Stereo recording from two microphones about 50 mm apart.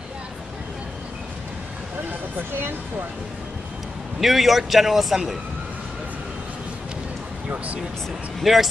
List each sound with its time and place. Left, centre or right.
4.2 s a man's voice: centre
7.4 s speech: right
8.4 s a man's voice: centre